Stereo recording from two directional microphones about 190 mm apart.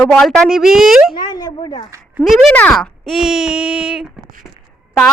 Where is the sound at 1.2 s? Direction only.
20° left (ahead or behind).